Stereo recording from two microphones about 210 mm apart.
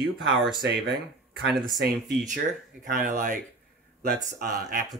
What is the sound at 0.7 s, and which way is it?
Speech, 50° right (ahead or behind).